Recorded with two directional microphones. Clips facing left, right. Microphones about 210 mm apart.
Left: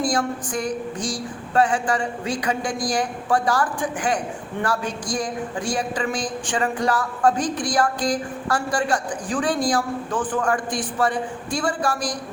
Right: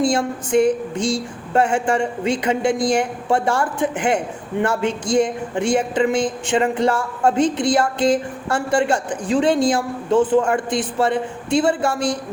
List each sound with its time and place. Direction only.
0.0 s a woman's voice: 25° right (ahead or behind)